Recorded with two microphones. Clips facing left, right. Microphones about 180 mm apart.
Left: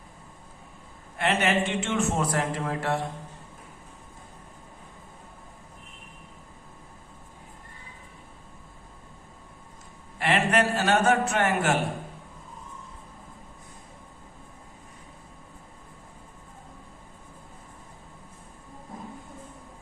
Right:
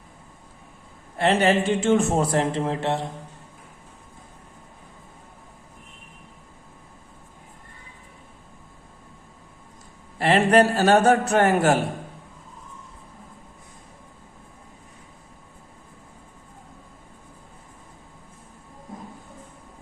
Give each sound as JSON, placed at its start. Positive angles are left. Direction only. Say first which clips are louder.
{"t": 1.1, "sound": "a man's voice", "louder": "right 5 dB", "side_deg": -35}
{"t": 10.2, "sound": "a man's voice", "louder": "right 6 dB", "side_deg": -35}